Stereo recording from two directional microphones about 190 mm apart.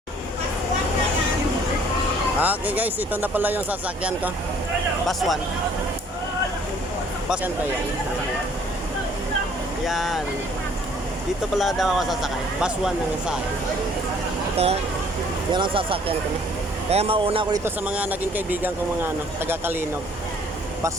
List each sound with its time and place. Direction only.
2.4 s speech: 10° right (ahead or behind)
9.8 s speech: centre (ahead or behind)
11.5 s speech: centre (ahead or behind)
14.5 s speech: 35° right (ahead or behind)
17.8 s speech: 5° right (ahead or behind)